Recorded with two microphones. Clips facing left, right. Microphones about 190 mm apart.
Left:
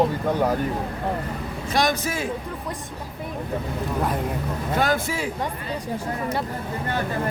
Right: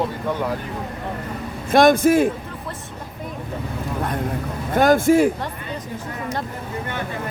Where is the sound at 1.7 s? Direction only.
55° right (ahead or behind).